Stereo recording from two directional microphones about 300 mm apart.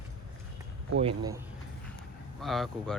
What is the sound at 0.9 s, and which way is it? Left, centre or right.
Speech, centre.